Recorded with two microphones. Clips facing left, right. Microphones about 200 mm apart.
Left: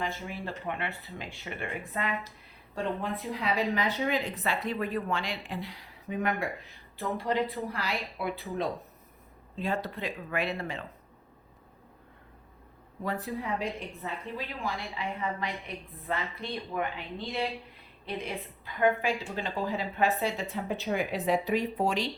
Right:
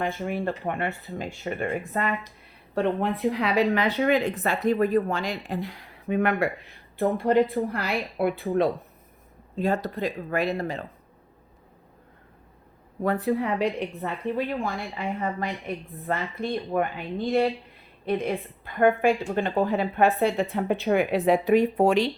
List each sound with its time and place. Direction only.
0.0 s speech: 55° right (ahead or behind)
2.7 s speech: 65° right (ahead or behind)
9.6 s speech: 40° right (ahead or behind)
13.0 s speech: 55° right (ahead or behind)